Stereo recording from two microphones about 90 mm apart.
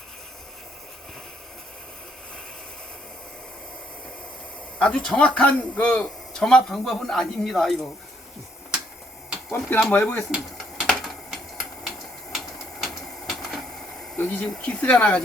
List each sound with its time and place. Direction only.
4.8 s a man's voice: 10° left (ahead or behind)
9.5 s speech: 25° left (ahead or behind)
10.8 s a sound: centre (ahead or behind)
12.8 s printer: centre (ahead or behind)
14.2 s speech: 20° left (ahead or behind)
14.4 s a man's voice: 10° left (ahead or behind)